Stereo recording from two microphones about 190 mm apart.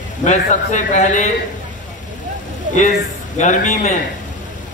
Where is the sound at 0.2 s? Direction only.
40° left (ahead or behind).